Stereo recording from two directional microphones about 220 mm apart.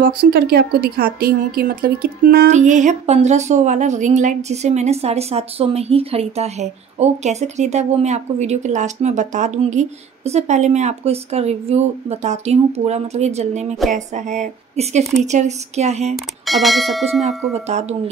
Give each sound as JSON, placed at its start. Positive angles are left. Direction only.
{"t": 0.0, "sound": "a woman's voice", "side_deg": -45}
{"t": 16.4, "sound": "speech", "side_deg": 0}
{"t": 17.6, "sound": "a woman's voice", "side_deg": -30}